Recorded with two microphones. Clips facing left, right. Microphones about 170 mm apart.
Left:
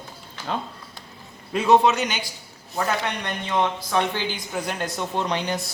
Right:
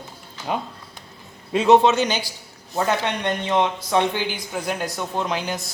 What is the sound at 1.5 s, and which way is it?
Speech, 20° right (ahead or behind).